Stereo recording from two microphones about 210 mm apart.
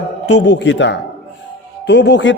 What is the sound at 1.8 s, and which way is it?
Speech, 55° left (ahead or behind).